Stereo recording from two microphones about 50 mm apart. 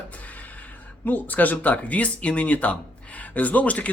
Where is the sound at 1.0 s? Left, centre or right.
Left.